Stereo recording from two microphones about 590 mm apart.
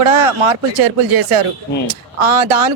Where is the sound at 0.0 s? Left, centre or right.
Right.